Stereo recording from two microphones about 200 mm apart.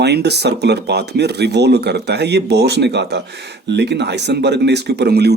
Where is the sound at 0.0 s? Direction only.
55° right (ahead or behind).